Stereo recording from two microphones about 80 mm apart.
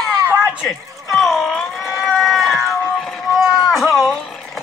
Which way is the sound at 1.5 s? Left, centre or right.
Centre.